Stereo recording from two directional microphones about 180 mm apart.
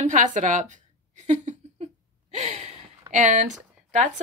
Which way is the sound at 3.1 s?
40° right (ahead or behind).